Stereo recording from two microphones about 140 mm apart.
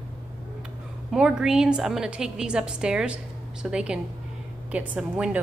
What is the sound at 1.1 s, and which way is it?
A woman's voice, 5° right (ahead or behind).